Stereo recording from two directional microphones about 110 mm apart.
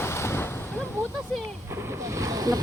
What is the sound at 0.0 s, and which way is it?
Ocean, 25° left (ahead or behind).